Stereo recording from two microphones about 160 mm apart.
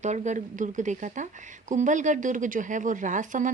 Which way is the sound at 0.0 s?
50° right (ahead or behind).